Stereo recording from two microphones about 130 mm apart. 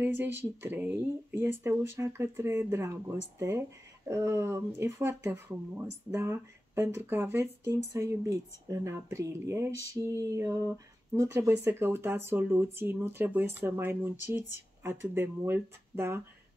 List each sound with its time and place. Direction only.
0.0 s speech: 15° right (ahead or behind)